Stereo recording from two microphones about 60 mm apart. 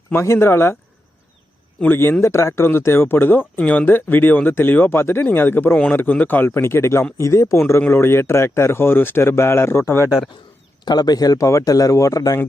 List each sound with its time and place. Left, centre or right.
0.1 s speech: left
1.9 s speech: left
3.6 s speech: left
3.8 s speech: left
7.8 s speech: left
10.9 s speech: left